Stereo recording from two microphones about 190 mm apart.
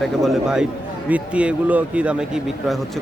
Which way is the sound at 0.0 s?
Centre (ahead or behind).